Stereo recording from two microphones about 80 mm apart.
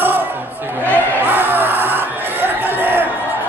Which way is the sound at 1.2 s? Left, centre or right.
Right.